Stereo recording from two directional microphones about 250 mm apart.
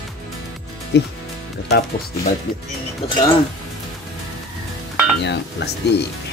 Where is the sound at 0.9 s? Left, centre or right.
Left.